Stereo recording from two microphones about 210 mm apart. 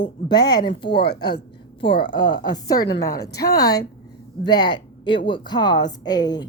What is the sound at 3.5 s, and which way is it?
A woman's voice, 15° left (ahead or behind).